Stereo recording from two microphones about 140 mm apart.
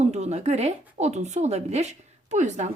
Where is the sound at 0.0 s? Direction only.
55° right (ahead or behind).